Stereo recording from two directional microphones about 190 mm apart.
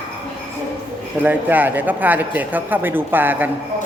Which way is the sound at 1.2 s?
10° right (ahead or behind).